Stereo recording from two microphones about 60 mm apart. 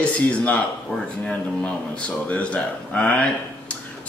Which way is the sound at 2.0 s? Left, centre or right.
Left.